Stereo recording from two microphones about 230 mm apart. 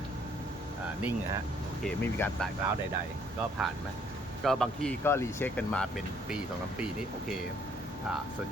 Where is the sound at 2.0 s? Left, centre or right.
Centre.